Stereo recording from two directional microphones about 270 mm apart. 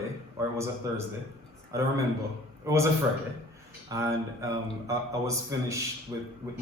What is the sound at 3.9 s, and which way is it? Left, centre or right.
Speech, centre.